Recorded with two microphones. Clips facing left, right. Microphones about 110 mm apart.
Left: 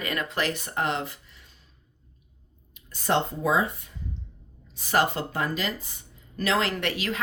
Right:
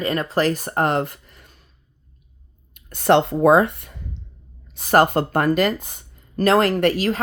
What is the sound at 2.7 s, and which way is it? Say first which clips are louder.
Speech: right 9 dB; 60° right (ahead or behind).